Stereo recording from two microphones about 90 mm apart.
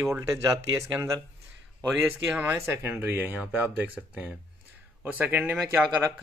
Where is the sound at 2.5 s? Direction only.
30° right (ahead or behind).